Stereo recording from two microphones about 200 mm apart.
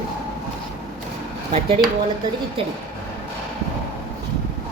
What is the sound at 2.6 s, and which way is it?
Speech, 30° right (ahead or behind).